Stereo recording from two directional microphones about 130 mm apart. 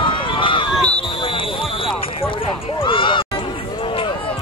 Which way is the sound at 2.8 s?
40° left (ahead or behind).